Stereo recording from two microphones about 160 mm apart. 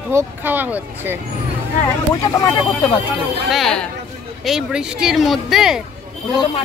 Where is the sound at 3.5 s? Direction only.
Centre (ahead or behind).